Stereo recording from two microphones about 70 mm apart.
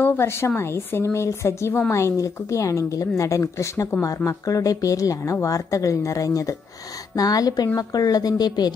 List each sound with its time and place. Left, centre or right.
0.0 s a woman's voice: left